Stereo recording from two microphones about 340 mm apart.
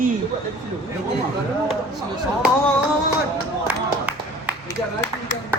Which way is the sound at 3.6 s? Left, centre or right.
Centre.